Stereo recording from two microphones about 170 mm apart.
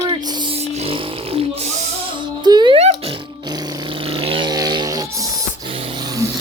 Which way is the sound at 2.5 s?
25° right (ahead or behind).